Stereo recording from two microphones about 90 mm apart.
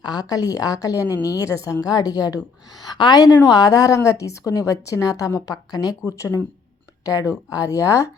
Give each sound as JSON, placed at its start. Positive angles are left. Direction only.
{"t": 0.0, "sound": "a woman's voice", "side_deg": 45}